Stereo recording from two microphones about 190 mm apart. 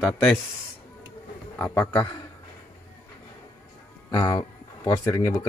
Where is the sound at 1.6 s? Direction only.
10° left (ahead or behind).